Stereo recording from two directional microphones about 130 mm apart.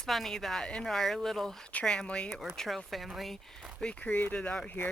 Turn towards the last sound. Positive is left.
turn(degrees=10)  # may be behind; listen again after turning